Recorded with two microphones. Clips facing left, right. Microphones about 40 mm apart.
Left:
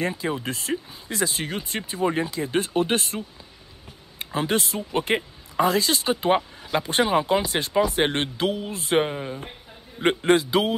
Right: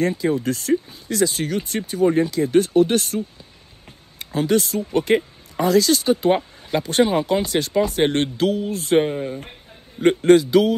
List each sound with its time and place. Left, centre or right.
0.2 s speech: left; by 9.4 s centre
9.9 s speech: left